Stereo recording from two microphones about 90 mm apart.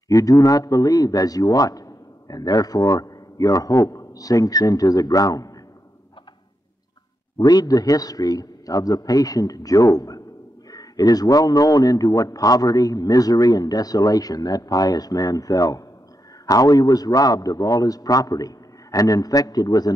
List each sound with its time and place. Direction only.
0.1 s speech: 40° left (ahead or behind)
7.3 s a man's voice: 45° left (ahead or behind)